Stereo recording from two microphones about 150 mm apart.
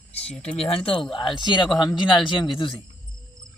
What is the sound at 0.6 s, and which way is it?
Speech, 40° left (ahead or behind).